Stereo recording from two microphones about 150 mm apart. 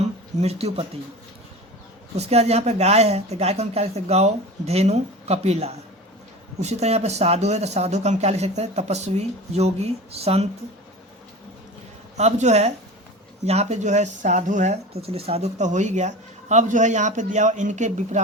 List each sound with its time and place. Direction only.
0.0 s a sound: 45° right (ahead or behind)
2.1 s speech: 45° right (ahead or behind)
12.1 s speech: 50° right (ahead or behind)